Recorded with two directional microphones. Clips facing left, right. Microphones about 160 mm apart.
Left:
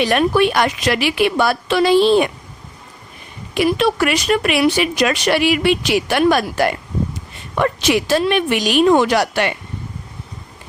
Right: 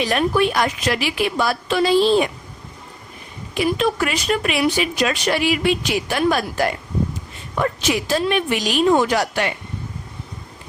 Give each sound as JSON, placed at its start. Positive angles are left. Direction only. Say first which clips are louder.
{"t": 0.0, "sound": "speech", "louder": "left 3 dB", "side_deg": 65}
{"t": 3.5, "sound": "speech", "louder": "left 3 dB", "side_deg": 70}